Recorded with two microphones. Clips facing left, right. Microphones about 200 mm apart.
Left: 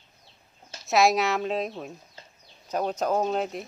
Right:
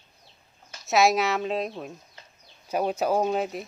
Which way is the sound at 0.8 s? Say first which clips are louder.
Even; centre (ahead or behind).